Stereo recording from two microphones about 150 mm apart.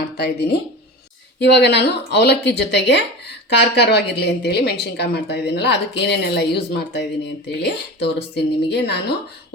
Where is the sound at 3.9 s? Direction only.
90° left.